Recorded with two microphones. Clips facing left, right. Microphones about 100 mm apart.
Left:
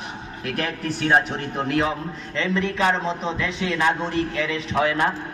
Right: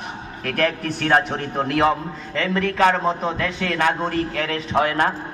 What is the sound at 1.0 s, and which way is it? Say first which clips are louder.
A man's voice: right 1 dB; 50° right (ahead or behind).